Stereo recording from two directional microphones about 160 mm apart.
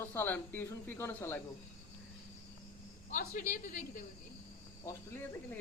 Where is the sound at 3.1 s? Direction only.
55° left (ahead or behind).